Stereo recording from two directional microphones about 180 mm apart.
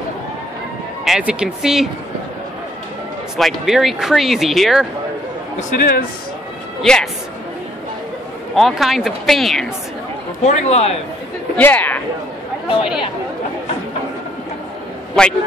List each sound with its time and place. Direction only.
1.0 s speech: 5° right (ahead or behind)
3.3 s speech: centre (ahead or behind)
5.6 s speech: 50° left (ahead or behind)
6.8 s speech: centre (ahead or behind)
8.5 s speech: centre (ahead or behind)
10.4 s a man's voice: 35° left (ahead or behind)
11.5 s speech: 10° left (ahead or behind)
15.2 s speech: 5° left (ahead or behind)